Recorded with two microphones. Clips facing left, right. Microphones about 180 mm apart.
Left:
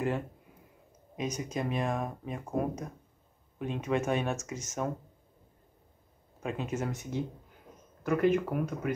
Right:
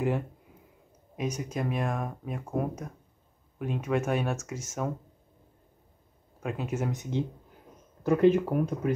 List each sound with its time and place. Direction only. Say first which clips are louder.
1.1 s speech: right 2 dB; 5° right (ahead or behind)
6.4 s speech: right 2 dB; 10° right (ahead or behind)
8.0 s speech: right 5 dB; 30° right (ahead or behind)